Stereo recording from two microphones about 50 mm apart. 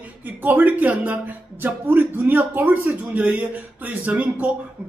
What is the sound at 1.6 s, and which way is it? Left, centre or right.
Speech, right.